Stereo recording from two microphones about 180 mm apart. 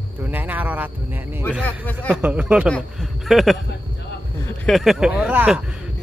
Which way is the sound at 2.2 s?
5° right (ahead or behind).